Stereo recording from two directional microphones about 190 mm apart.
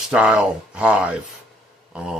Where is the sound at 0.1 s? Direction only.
5° right (ahead or behind).